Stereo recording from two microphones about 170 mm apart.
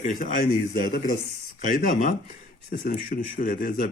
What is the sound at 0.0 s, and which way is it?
A man's voice, 50° left (ahead or behind).